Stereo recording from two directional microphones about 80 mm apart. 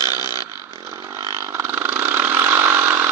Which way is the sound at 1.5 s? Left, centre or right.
Right.